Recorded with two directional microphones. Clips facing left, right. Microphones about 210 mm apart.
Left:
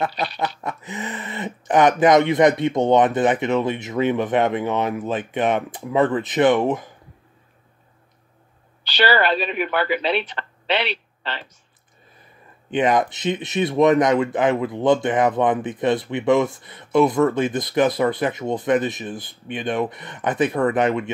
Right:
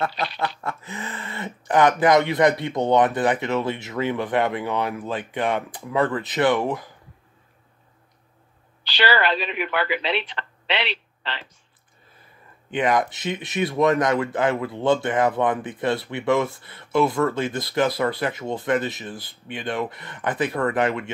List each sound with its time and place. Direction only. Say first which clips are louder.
0.0 s speech: left 2 dB; 20° left (ahead or behind)
9.1 s speech: left 3 dB; 45° left (ahead or behind)
12.7 s speech: left 3 dB; 20° left (ahead or behind)